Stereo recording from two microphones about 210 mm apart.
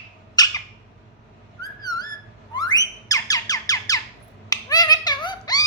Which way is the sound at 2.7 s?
15° left (ahead or behind).